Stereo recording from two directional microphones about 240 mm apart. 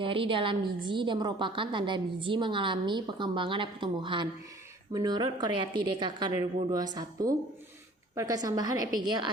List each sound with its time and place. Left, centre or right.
0.0 s a woman's voice: right